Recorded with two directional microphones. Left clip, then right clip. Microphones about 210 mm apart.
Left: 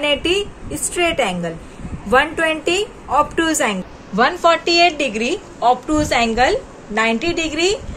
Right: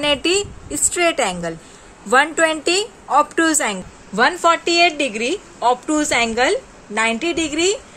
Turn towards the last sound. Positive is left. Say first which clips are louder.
# left 1 dB
turn(degrees=-50)  # may be behind; listen again after turning